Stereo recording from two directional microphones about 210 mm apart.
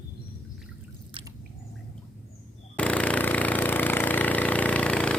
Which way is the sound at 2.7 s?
5° left (ahead or behind).